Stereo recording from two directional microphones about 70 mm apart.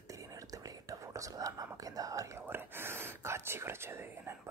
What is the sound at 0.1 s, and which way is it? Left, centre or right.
Whispering, right.